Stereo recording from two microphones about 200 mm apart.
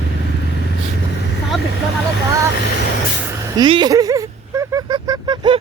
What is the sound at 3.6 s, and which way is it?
Speech, 20° right (ahead or behind).